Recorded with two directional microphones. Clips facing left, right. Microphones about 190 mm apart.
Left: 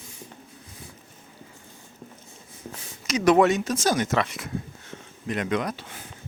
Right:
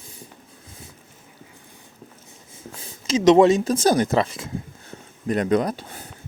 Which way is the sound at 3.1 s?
25° right (ahead or behind).